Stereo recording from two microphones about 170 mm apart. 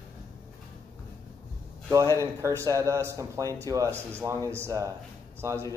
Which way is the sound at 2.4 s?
20° right (ahead or behind).